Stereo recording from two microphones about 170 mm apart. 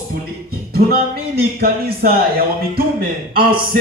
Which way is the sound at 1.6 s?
60° right (ahead or behind).